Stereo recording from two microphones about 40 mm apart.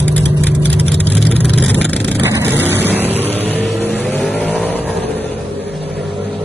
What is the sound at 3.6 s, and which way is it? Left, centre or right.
Vehicle, centre.